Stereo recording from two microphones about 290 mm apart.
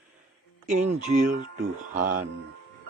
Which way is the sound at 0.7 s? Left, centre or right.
Right.